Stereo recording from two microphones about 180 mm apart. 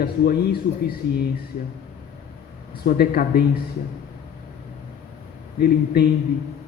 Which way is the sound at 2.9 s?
55° left (ahead or behind).